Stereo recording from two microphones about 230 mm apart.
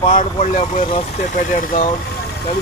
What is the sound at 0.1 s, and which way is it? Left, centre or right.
Speech, left.